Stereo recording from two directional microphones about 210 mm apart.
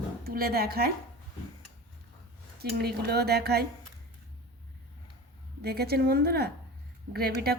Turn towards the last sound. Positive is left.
turn(degrees=-50)  # may be behind; listen again after turning